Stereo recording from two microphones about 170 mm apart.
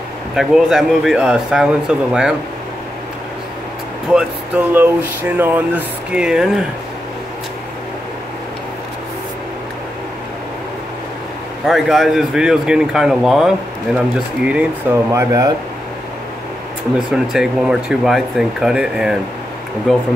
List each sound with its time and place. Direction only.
0.4 s speech: centre (ahead or behind)
4.1 s speech: 10° right (ahead or behind)
11.6 s speech: centre (ahead or behind)
15.0 s speech: 20° right (ahead or behind)
17.1 s speech: 5° right (ahead or behind)